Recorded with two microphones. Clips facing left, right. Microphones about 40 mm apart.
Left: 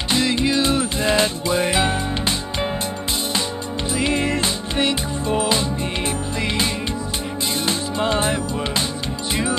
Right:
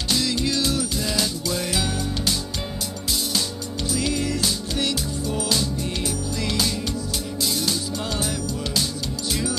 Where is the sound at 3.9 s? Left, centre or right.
Left.